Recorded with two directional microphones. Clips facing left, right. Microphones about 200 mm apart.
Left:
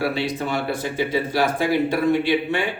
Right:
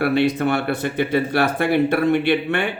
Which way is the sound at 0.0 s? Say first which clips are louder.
Right 6 dB; 60° right (ahead or behind).